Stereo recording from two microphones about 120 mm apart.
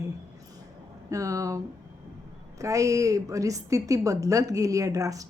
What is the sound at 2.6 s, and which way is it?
A woman's voice, 25° right (ahead or behind).